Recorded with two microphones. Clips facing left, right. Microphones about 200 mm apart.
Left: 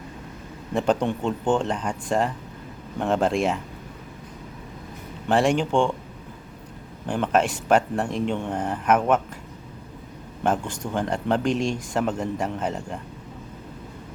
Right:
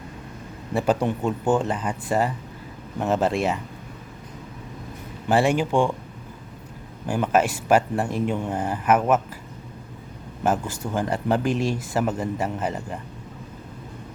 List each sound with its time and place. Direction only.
0.7 s speech: 5° right (ahead or behind)
5.3 s speech: 5° right (ahead or behind)
7.1 s speech: 5° right (ahead or behind)
10.4 s speech: 5° right (ahead or behind)